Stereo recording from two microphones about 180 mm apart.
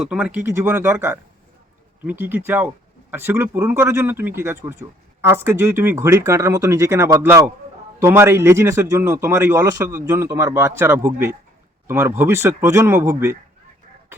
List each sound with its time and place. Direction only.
0.1 s speech: 10° right (ahead or behind)